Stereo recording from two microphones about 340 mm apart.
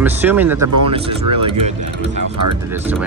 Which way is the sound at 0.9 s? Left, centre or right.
Centre.